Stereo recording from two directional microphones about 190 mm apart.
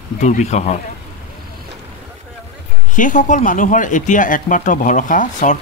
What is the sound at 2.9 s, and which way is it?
Speech, 40° left (ahead or behind).